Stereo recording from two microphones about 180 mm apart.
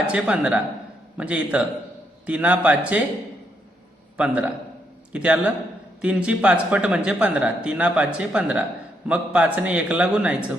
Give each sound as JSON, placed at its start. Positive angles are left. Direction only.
{"t": 0.1, "sound": "a man's voice", "side_deg": -5}
{"t": 4.2, "sound": "a man's voice", "side_deg": -5}